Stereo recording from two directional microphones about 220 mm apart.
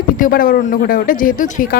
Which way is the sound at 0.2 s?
40° left (ahead or behind).